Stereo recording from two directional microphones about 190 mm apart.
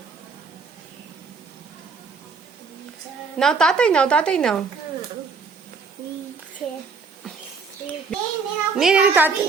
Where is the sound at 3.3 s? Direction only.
5° left (ahead or behind).